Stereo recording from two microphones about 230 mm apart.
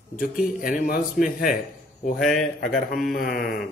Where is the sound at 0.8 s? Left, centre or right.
Left.